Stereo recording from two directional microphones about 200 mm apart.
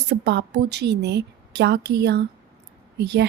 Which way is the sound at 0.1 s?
60° right (ahead or behind).